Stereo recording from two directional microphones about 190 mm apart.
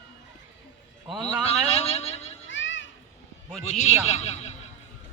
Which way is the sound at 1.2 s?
35° left (ahead or behind).